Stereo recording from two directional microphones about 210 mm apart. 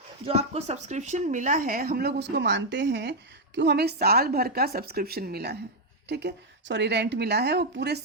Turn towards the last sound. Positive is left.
turn(degrees=-55)  # may be behind; listen again after turning